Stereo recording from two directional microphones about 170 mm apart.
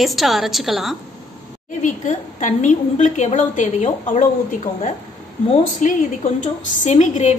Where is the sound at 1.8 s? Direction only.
45° left (ahead or behind).